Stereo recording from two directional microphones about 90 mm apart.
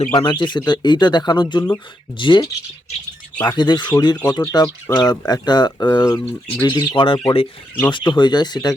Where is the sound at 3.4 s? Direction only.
55° left (ahead or behind).